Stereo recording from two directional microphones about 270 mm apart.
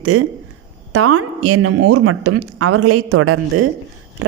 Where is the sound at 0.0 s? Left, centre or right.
Right.